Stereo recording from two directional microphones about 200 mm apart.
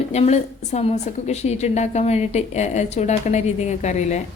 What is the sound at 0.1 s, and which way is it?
A woman's voice, 35° left (ahead or behind).